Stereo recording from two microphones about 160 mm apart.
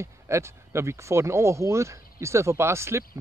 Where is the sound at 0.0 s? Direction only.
15° right (ahead or behind).